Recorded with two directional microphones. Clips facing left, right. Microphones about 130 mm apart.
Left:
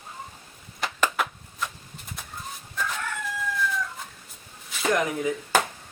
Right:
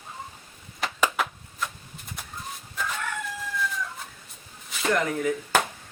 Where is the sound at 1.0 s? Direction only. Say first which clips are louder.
Even; centre (ahead or behind).